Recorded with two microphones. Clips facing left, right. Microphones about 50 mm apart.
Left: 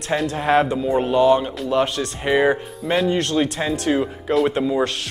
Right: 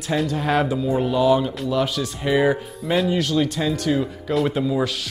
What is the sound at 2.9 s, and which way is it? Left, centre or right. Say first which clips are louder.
Speech: left 1 dB; centre.